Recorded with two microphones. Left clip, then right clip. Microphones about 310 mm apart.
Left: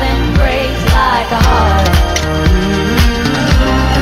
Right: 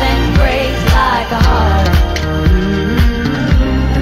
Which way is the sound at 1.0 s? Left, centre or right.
Centre.